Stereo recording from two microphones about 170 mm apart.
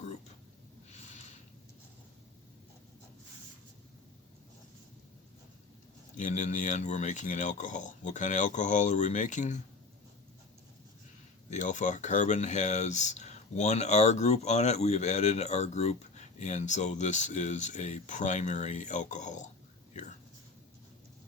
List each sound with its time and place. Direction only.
6.1 s speech: 45° left (ahead or behind)
11.5 s speech: 45° left (ahead or behind)